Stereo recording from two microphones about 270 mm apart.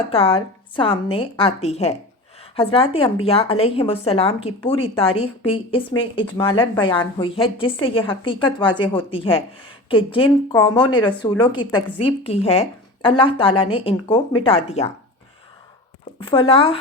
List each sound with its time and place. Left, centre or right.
0.1 s a woman's voice: left
16.2 s speech: centre